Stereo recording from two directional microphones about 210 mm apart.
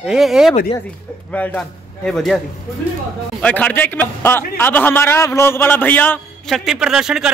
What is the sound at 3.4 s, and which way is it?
A man's voice, 5° left (ahead or behind).